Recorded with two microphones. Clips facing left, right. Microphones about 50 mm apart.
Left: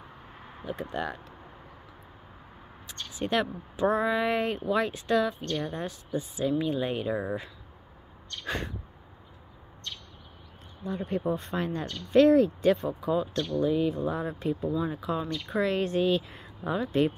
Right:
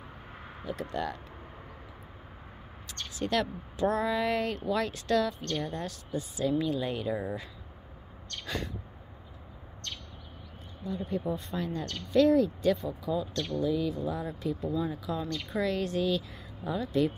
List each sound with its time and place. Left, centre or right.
0.7 s speech: centre
2.9 s speech: centre
10.8 s speech: left
14.6 s speech: left